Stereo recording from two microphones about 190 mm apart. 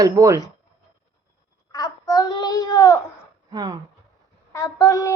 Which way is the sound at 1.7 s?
20° left (ahead or behind).